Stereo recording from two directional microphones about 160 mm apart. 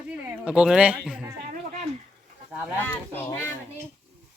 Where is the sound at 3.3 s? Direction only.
15° left (ahead or behind).